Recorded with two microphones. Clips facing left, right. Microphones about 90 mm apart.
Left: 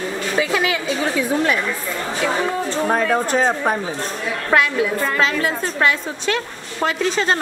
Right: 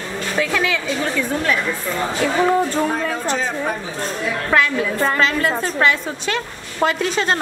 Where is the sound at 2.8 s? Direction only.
50° left (ahead or behind).